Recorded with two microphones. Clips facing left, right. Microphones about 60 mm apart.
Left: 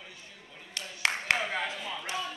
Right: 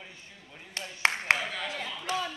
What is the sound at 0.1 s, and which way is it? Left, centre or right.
Clapping, right.